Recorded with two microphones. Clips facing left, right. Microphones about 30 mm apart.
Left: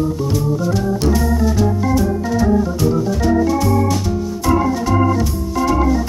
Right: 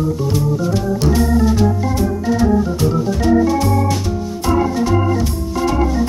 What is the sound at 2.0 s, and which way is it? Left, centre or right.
Organ, centre.